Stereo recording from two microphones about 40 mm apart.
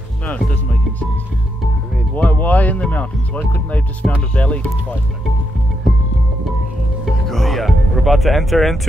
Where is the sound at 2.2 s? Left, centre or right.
Left.